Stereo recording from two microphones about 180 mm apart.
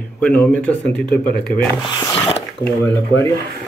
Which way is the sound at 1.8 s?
30° left (ahead or behind).